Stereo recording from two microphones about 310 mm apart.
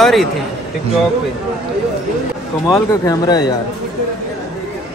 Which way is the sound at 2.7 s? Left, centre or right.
Centre.